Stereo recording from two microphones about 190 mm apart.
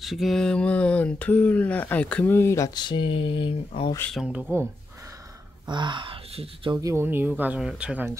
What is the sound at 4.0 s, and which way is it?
Speech, 5° left (ahead or behind).